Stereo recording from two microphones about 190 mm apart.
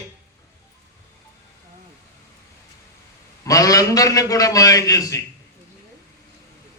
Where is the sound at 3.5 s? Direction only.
20° left (ahead or behind).